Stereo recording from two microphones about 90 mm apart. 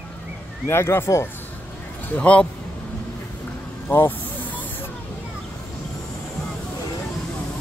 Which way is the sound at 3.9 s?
20° left (ahead or behind).